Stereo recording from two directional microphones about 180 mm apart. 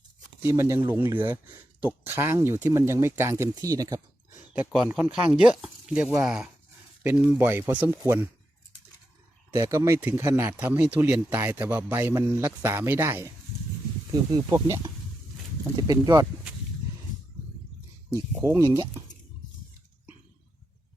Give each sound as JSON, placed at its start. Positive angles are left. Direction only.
{"t": 0.4, "sound": "speech", "side_deg": -15}
{"t": 4.5, "sound": "speech", "side_deg": -5}
{"t": 9.6, "sound": "speech", "side_deg": -15}
{"t": 18.1, "sound": "speech", "side_deg": -20}